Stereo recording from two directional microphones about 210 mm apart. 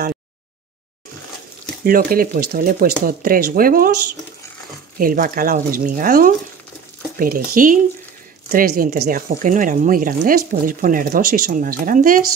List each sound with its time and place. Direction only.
1.9 s speech: 45° right (ahead or behind)
4.9 s speech: 40° right (ahead or behind)